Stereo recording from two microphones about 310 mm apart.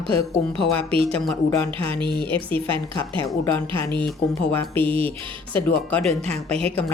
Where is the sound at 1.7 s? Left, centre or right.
Centre.